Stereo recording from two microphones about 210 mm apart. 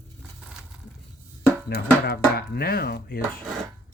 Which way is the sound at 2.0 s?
50° left (ahead or behind).